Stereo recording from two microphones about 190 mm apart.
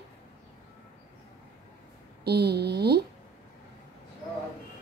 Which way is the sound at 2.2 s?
60° right (ahead or behind).